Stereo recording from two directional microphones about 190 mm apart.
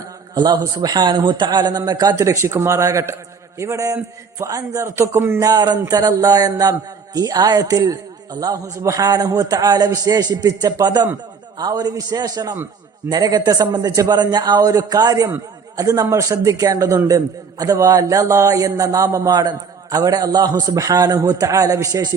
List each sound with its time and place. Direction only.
0.3 s a man's voice: 20° right (ahead or behind)